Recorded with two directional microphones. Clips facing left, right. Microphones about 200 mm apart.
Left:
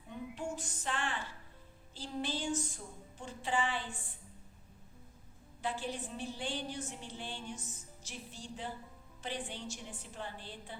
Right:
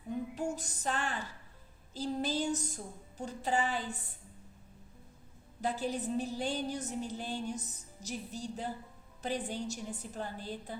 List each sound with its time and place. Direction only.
0.3 s female singing: 40° right (ahead or behind)
1.9 s a woman's voice: 40° right (ahead or behind)
5.6 s a woman's voice: 40° right (ahead or behind)